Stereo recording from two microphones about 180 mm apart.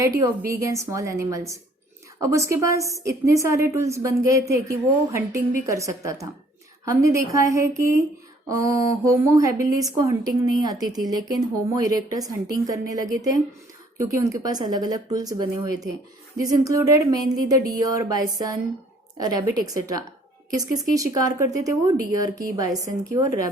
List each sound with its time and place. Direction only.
0.5 s a woman's voice: 15° right (ahead or behind)